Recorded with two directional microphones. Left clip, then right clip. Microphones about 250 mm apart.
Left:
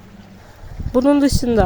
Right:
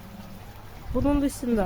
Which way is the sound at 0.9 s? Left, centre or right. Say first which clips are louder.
Left 11 dB; left.